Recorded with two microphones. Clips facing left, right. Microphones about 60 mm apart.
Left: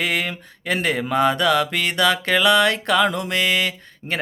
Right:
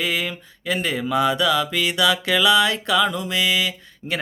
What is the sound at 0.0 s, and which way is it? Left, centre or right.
Music, left.